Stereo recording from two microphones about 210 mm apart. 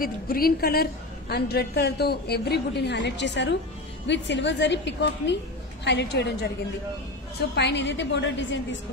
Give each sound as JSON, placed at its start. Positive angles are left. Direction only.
{"t": 0.0, "sound": "a woman's voice", "side_deg": 45}
{"t": 7.5, "sound": "a woman's voice", "side_deg": 55}